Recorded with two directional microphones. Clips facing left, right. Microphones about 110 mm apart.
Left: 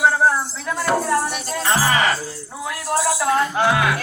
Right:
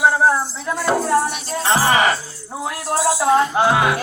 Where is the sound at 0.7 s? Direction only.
25° right (ahead or behind).